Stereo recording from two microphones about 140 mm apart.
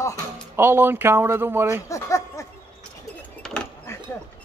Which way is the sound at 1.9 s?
20° left (ahead or behind).